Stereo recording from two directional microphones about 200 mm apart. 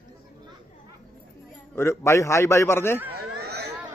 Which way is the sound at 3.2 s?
55° right (ahead or behind).